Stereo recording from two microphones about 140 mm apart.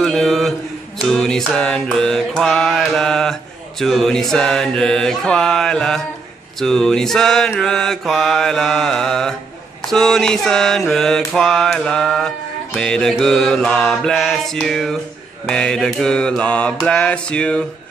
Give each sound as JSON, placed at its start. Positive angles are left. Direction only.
{"t": 0.0, "sound": "mantra", "side_deg": 5}